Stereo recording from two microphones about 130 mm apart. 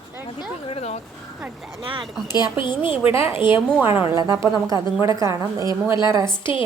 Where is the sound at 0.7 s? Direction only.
55° left (ahead or behind).